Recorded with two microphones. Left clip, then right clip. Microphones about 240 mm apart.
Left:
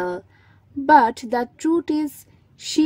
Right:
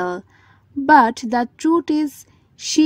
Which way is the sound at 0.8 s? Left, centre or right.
Right.